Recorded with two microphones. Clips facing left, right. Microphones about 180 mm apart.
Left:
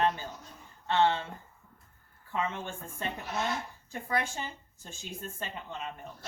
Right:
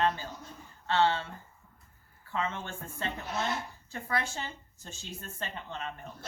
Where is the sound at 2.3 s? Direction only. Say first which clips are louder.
Left 1 dB; 15° left (ahead or behind).